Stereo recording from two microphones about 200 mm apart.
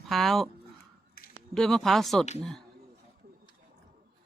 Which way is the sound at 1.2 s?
50° left (ahead or behind).